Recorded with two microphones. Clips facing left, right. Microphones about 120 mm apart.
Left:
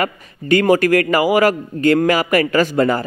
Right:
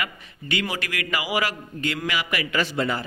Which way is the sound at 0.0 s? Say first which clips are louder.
Left 11 dB; 45° left (ahead or behind).